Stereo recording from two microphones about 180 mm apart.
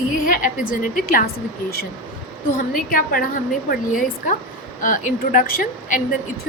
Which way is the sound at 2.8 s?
50° left (ahead or behind).